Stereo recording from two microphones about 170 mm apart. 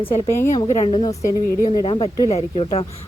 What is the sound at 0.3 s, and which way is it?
Speech, 15° left (ahead or behind).